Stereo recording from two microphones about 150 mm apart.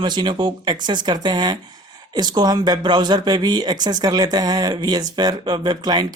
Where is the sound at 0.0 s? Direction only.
30° right (ahead or behind).